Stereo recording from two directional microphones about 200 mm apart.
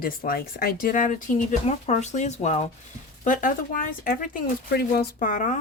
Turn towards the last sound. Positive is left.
turn(degrees=40)  # may be behind; listen again after turning